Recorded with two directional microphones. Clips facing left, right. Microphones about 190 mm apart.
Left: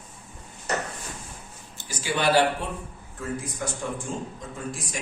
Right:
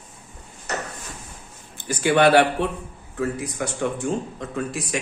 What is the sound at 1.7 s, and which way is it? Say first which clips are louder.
Speech: right 10 dB; 60° right (ahead or behind).